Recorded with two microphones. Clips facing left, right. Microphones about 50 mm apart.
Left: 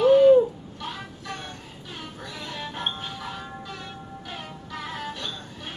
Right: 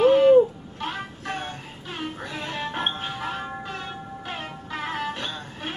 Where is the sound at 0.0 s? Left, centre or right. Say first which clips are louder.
Left 1 dB; right.